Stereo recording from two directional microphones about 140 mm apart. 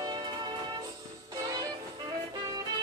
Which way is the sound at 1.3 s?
30° right (ahead or behind).